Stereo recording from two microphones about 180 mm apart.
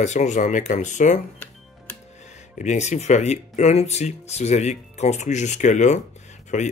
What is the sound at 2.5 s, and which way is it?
Speech, 40° left (ahead or behind).